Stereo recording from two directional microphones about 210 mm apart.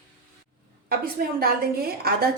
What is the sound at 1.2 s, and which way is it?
Speech, 45° right (ahead or behind).